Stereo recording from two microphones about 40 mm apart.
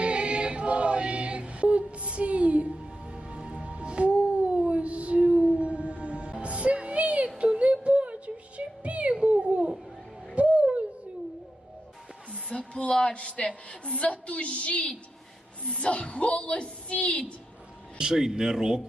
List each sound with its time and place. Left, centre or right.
0.0 s choir: right
6.4 s music: right
10.3 s owl: right
12.3 s a sound: left
13.8 s a woman's voice: left
18.0 s speech: centre